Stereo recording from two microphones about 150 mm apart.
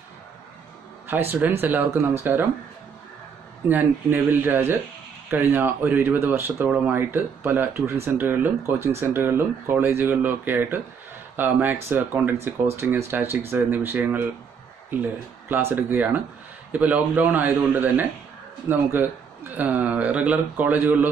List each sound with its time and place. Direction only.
1.0 s speech: 15° right (ahead or behind)
3.6 s speech: 15° right (ahead or behind)